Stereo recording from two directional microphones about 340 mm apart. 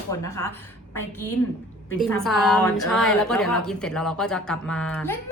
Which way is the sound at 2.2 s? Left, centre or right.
Centre.